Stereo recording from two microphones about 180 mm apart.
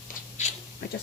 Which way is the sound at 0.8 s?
65° left (ahead or behind).